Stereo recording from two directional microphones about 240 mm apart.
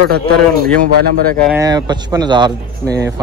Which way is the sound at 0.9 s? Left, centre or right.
Right.